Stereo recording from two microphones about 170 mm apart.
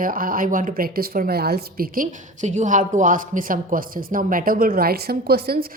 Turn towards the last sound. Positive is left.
turn(degrees=-65)  # may be behind; listen again after turning